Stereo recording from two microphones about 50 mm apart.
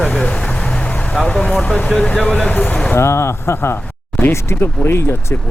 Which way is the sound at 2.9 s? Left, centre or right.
Left.